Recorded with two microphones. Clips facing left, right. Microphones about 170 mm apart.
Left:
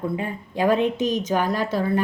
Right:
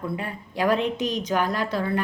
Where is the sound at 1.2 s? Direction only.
20° left (ahead or behind).